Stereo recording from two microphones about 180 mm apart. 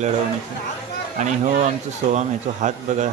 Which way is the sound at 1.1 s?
40° right (ahead or behind).